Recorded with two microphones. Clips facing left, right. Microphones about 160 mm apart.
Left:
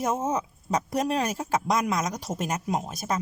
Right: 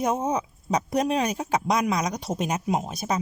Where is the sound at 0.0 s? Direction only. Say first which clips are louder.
Right 2 dB; 15° right (ahead or behind).